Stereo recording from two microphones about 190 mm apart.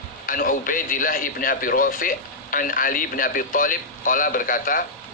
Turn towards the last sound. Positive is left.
turn(degrees=45)  # may be behind; listen again after turning